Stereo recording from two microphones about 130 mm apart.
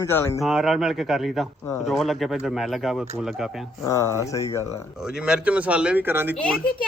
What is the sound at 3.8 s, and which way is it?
Speech, 25° left (ahead or behind).